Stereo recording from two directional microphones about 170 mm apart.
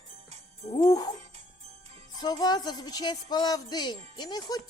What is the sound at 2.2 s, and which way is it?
Speech, 25° left (ahead or behind).